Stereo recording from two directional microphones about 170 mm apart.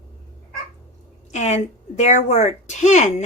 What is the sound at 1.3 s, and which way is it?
A woman's voice, 40° left (ahead or behind).